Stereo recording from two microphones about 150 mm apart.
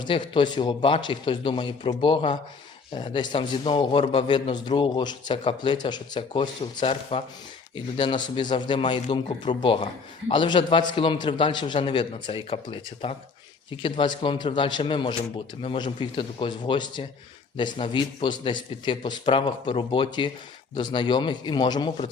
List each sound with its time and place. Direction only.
0.0 s a man's voice: 30° left (ahead or behind)